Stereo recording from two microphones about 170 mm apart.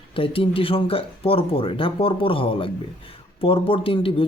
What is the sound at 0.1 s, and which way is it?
A man's voice, 30° left (ahead or behind).